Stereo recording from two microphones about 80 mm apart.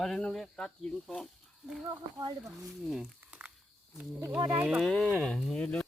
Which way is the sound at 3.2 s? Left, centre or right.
Centre.